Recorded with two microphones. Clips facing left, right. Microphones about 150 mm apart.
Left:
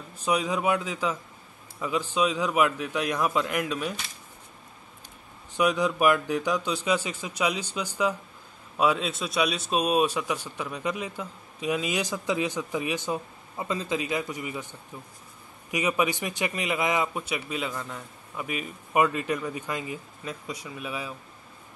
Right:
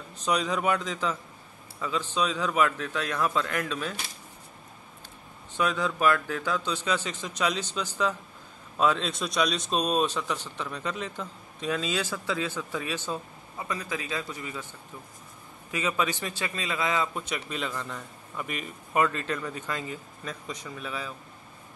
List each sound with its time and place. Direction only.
0.2 s a man's voice: 10° left (ahead or behind)
5.6 s a man's voice: 15° left (ahead or behind)